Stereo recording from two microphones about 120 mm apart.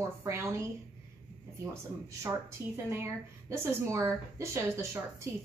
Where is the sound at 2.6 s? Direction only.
30° left (ahead or behind).